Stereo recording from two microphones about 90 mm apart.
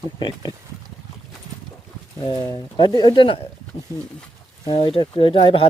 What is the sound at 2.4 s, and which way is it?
Speech, 60° left (ahead or behind).